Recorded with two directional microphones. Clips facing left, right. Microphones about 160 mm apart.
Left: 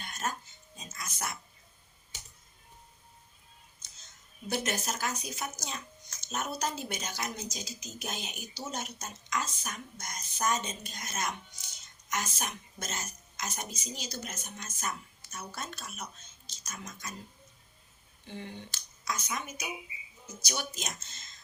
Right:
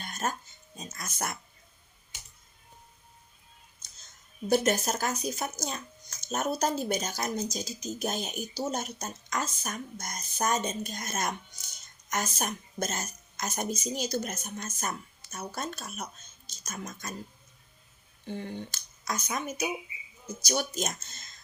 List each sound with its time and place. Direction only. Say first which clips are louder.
0.0 s music: right 3 dB; 45° right (ahead or behind)
0.8 s a sound: right 4 dB; 45° right (ahead or behind)
4.4 s speech: right 8 dB; 40° right (ahead or behind)
18.3 s speech: right 6 dB; 45° right (ahead or behind)